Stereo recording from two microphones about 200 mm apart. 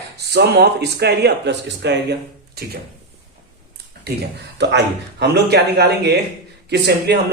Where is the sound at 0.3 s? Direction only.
55° right (ahead or behind).